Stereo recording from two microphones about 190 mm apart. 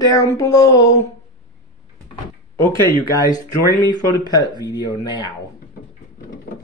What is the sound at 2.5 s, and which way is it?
Speech, 15° left (ahead or behind).